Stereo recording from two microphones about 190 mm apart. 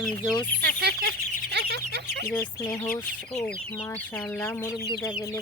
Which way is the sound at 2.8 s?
50° left (ahead or behind).